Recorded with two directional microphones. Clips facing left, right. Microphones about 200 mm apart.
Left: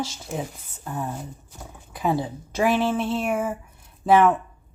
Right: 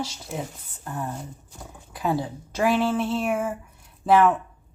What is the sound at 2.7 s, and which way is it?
Speech, 15° left (ahead or behind).